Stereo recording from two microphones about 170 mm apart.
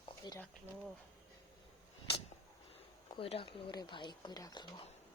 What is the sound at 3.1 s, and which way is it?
Speech, 35° left (ahead or behind).